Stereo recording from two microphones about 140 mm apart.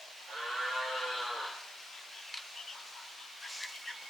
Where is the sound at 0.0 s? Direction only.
Centre (ahead or behind).